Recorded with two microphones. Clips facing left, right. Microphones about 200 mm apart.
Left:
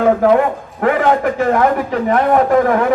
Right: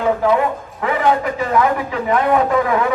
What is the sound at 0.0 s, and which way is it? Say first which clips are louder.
A man's voice: left 4 dB; 50° left (ahead or behind).